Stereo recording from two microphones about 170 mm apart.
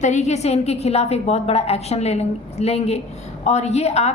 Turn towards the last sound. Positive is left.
turn(degrees=40)  # may be behind; listen again after turning